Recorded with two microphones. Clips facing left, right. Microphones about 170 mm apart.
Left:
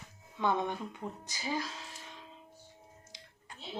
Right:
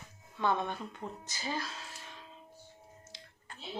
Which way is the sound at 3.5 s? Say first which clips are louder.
Even; 15° left (ahead or behind).